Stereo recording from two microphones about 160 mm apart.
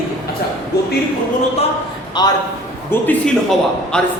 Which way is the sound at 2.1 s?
25° left (ahead or behind).